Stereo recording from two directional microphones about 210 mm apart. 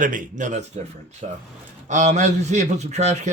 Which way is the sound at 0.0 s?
40° right (ahead or behind).